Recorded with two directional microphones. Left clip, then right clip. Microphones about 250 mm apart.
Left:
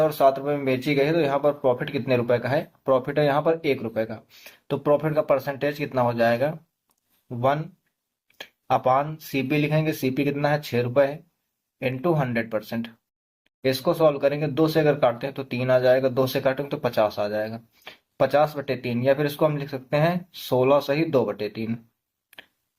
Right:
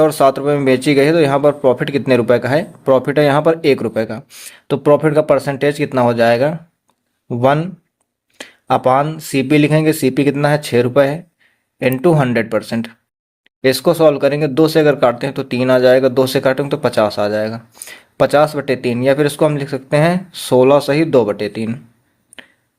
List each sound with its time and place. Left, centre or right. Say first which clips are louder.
0.0 s speech: right 8 dB; right